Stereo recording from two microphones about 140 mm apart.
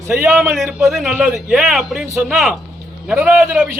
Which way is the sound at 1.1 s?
15° right (ahead or behind).